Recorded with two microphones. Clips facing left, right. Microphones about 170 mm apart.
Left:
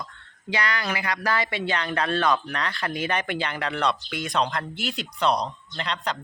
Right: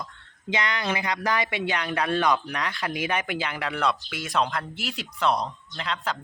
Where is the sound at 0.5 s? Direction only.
20° right (ahead or behind).